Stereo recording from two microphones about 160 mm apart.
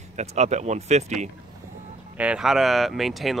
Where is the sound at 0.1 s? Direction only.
45° right (ahead or behind).